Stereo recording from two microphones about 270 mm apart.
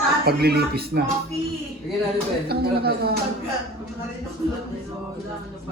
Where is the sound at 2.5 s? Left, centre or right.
Right.